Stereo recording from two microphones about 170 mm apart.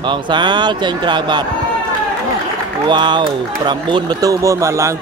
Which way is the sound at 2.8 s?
25° right (ahead or behind).